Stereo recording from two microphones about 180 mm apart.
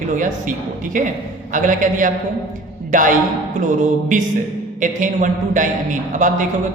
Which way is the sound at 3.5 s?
45° right (ahead or behind).